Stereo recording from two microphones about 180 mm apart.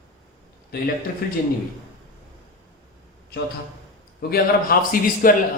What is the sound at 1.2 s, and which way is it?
Speech, 60° left (ahead or behind).